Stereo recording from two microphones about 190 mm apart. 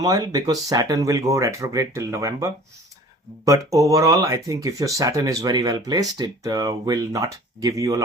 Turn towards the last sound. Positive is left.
turn(degrees=-15)  # may be behind; listen again after turning